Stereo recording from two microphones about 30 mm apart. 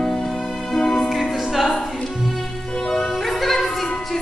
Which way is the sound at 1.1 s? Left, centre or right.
Centre.